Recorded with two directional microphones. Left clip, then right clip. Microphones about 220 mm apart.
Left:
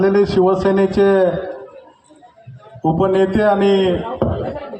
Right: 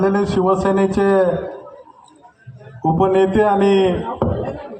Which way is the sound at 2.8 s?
50° left (ahead or behind).